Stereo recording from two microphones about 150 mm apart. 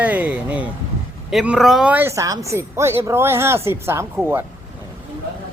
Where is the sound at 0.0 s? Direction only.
10° right (ahead or behind).